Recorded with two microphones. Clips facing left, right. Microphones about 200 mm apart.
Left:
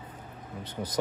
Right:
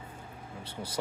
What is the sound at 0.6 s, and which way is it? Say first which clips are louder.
Speech: left 5 dB; 10° right (ahead or behind).